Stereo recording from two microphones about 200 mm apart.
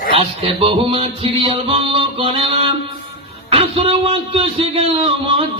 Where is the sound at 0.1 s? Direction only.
30° right (ahead or behind).